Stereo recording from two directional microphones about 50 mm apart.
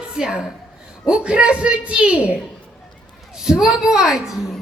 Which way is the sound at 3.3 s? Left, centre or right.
Centre.